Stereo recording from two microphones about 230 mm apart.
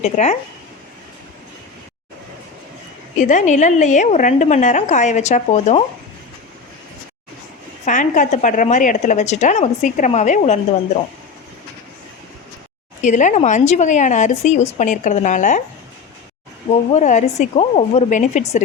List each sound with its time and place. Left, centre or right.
0.0 s speech: left
3.2 s a woman's voice: left
7.9 s a woman's voice: left
13.0 s a woman's voice: left
16.9 s a woman's voice: left